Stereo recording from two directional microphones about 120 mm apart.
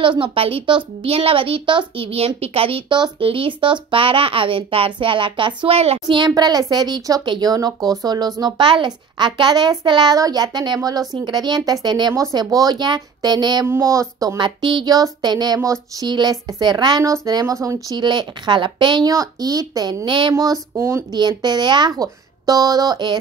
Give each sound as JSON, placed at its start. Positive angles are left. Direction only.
{"t": 0.0, "sound": "a child's voice", "side_deg": -45}
{"t": 5.6, "sound": "a woman's voice", "side_deg": -55}
{"t": 6.0, "sound": "a child's voice", "side_deg": -40}
{"t": 17.8, "sound": "a child's voice", "side_deg": -40}
{"t": 21.1, "sound": "a child's voice", "side_deg": -35}